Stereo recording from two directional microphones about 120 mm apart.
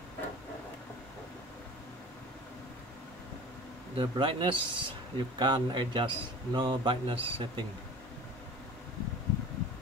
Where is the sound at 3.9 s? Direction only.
45° right (ahead or behind).